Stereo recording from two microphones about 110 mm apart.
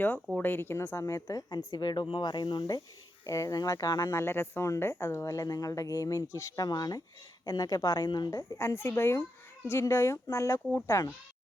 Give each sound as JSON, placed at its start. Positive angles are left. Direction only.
{"t": 0.3, "sound": "a woman's voice", "side_deg": 20}
{"t": 3.2, "sound": "a woman's voice", "side_deg": 30}
{"t": 4.2, "sound": "a woman's voice", "side_deg": 20}